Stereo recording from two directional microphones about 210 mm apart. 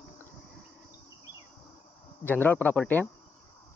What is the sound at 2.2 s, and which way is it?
Speech, 10° left (ahead or behind).